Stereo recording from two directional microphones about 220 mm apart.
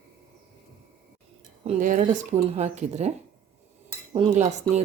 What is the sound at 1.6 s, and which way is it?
Speech, 35° right (ahead or behind).